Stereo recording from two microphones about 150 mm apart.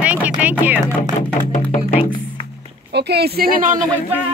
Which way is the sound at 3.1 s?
90° right.